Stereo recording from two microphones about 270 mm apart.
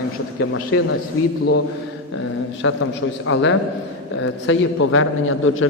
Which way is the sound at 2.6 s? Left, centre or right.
Left.